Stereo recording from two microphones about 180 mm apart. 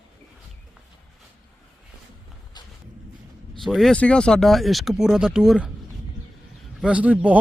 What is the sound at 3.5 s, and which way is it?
Speech, centre (ahead or behind).